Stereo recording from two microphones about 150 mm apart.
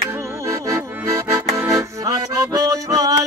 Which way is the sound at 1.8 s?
20° right (ahead or behind).